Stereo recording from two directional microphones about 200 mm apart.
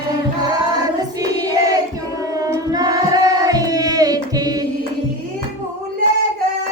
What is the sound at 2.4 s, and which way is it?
Singing, 20° right (ahead or behind).